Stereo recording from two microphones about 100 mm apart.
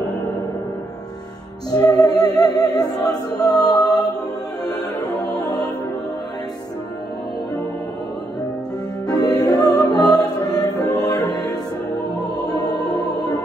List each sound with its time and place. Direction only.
1.7 s music: 40° left (ahead or behind)
9.1 s music: 40° left (ahead or behind)
9.5 s music: 10° left (ahead or behind)
9.8 s music: 40° left (ahead or behind)